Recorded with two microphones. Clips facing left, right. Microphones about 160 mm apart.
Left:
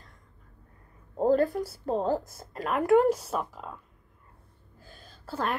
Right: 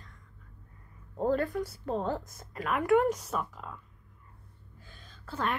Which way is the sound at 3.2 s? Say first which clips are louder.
Left 2 dB; 5° left (ahead or behind).